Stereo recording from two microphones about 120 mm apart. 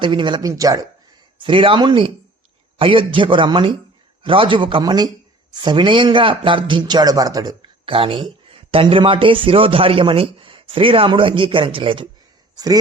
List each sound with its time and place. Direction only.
0.0 s speech: 40° right (ahead or behind)
1.4 s speech: 45° right (ahead or behind)
12.5 s speech: 30° right (ahead or behind)